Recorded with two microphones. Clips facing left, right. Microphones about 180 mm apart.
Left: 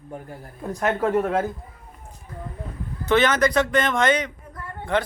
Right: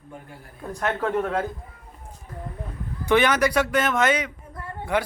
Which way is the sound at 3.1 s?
10° right (ahead or behind).